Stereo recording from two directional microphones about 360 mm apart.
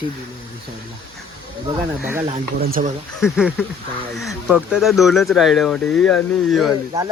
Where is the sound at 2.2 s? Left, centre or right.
Right.